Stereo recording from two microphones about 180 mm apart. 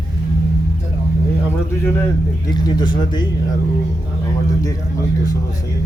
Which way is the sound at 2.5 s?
25° left (ahead or behind).